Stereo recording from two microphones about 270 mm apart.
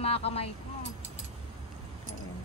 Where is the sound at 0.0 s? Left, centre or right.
Left.